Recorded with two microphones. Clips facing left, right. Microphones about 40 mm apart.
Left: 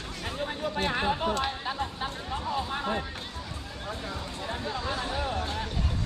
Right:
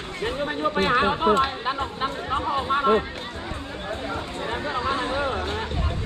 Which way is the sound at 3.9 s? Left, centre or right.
Right.